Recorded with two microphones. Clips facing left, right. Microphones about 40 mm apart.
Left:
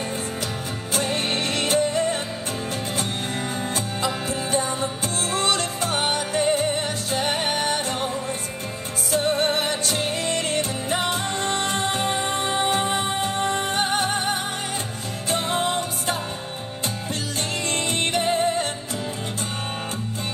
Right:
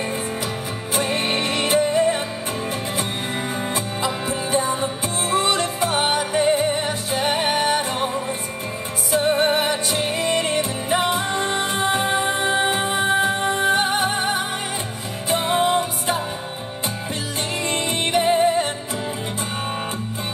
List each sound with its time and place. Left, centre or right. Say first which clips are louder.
0.9 s music: right 3 dB; right
17.6 s music: right 2 dB; centre